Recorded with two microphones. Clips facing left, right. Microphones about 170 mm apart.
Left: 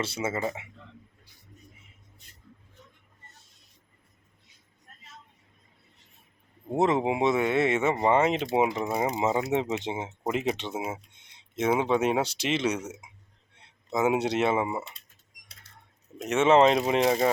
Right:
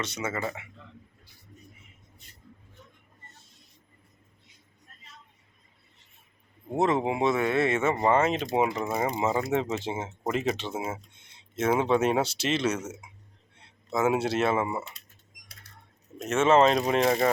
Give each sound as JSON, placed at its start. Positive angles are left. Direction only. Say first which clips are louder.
{"t": 0.0, "sound": "speech", "louder": "left 2 dB", "side_deg": 30}
{"t": 6.7, "sound": "speech", "louder": "left 1 dB", "side_deg": 20}
{"t": 16.3, "sound": "speech", "louder": "left 1 dB", "side_deg": 15}